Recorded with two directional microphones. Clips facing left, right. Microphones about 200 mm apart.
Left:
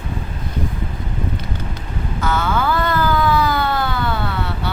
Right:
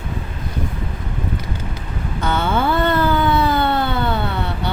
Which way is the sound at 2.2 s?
30° right (ahead or behind).